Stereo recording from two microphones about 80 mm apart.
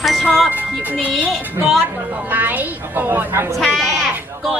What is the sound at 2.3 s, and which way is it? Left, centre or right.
A woman's voice, right.